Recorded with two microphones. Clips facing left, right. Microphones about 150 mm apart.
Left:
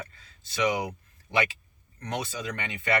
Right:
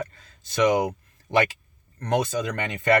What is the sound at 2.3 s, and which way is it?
Speech, 45° right (ahead or behind).